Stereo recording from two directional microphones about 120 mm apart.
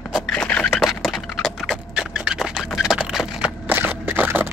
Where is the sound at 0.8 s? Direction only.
Centre (ahead or behind).